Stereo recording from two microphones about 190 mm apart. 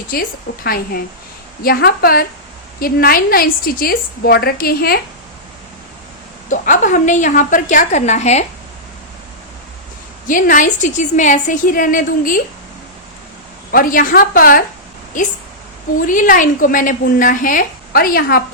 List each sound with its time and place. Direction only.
0.1 s a woman's voice: 50° left (ahead or behind)
6.5 s a woman's voice: 40° left (ahead or behind)
10.2 s a woman's voice: 45° left (ahead or behind)
13.7 s a woman's voice: 50° left (ahead or behind)